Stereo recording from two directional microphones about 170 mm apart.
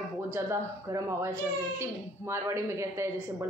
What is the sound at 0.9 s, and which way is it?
A child's voice, 20° right (ahead or behind).